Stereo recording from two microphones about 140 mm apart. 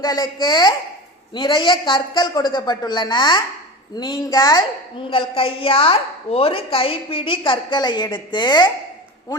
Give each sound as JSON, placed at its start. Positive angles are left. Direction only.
{"t": 0.0, "sound": "a woman's voice", "side_deg": 30}